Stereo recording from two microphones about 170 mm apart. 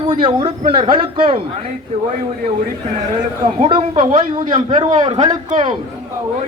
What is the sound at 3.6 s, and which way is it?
A man's voice, 35° right (ahead or behind).